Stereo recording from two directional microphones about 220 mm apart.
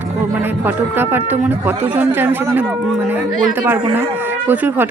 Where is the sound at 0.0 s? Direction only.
10° right (ahead or behind).